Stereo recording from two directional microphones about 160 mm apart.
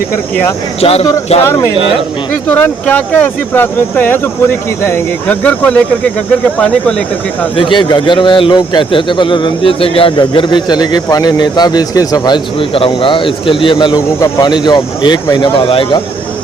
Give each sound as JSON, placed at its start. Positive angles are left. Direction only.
{"t": 0.8, "sound": "speech", "side_deg": 40}
{"t": 2.3, "sound": "speech", "side_deg": 10}
{"t": 7.5, "sound": "a man's voice", "side_deg": 30}